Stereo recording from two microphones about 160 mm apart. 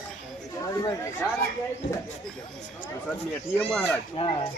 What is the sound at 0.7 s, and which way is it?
Speech, 20° left (ahead or behind).